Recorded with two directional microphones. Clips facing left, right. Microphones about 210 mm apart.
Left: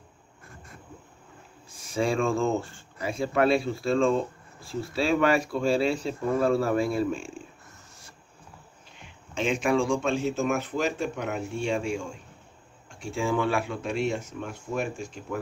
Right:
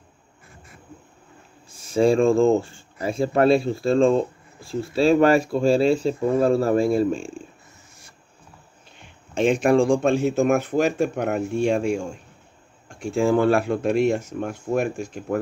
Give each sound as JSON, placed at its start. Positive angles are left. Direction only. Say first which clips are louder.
{"t": 2.0, "sound": "speech", "louder": "right 8 dB", "side_deg": -35}
{"t": 6.9, "sound": "speech", "louder": "right 6 dB", "side_deg": -40}
{"t": 9.4, "sound": "speech", "louder": "right 7 dB", "side_deg": -50}